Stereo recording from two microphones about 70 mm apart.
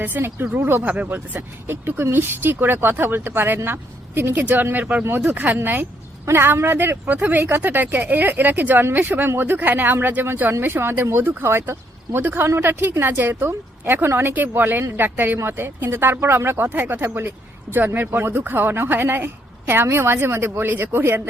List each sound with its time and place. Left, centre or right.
0.0 s speech: right
6.2 s speech: right